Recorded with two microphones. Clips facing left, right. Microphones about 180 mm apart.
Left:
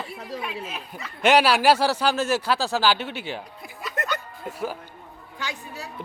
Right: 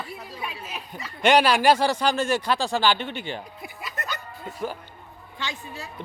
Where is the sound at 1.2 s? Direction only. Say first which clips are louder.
Even; 5° left (ahead or behind).